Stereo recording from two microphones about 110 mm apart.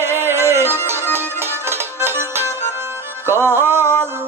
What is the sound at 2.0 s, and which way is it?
Music, 20° right (ahead or behind).